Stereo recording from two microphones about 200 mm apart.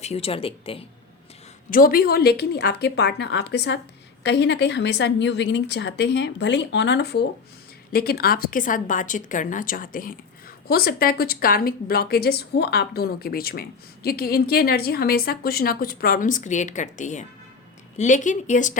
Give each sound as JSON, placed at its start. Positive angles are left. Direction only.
{"t": 0.0, "sound": "speech", "side_deg": 30}
{"t": 1.7, "sound": "a woman's voice", "side_deg": 45}